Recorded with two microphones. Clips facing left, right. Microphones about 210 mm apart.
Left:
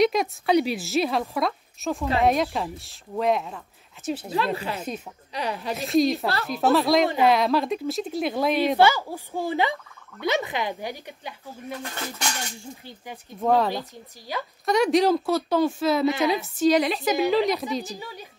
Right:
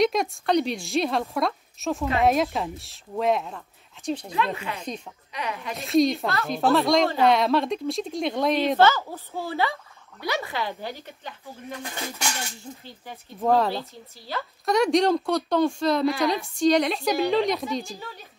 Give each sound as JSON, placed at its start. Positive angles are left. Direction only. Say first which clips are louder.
{"t": 0.0, "sound": "a woman's voice", "louder": "left 1 dB", "side_deg": 0}
{"t": 4.3, "sound": "speech", "louder": "left 2 dB", "side_deg": 35}
{"t": 5.8, "sound": "a woman's voice", "louder": "right 1 dB", "side_deg": 0}
{"t": 6.1, "sound": "speech", "louder": "left 1 dB", "side_deg": 35}
{"t": 6.4, "sound": "a woman's voice", "louder": "even", "side_deg": 0}
{"t": 11.8, "sound": "speech", "louder": "even", "side_deg": -15}
{"t": 13.4, "sound": "a woman's voice", "louder": "even", "side_deg": 0}
{"t": 13.7, "sound": "a woman's voice", "louder": "even", "side_deg": 15}
{"t": 14.7, "sound": "a woman's voice", "louder": "left 1 dB", "side_deg": 0}